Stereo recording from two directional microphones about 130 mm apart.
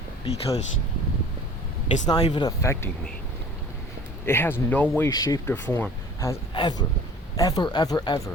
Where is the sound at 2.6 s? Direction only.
20° left (ahead or behind).